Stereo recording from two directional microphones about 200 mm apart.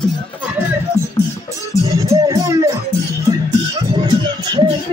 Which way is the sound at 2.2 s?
15° right (ahead or behind).